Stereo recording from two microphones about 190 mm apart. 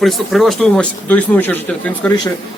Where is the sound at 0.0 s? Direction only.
Centre (ahead or behind).